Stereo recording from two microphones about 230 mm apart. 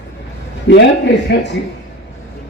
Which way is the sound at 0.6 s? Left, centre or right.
Left.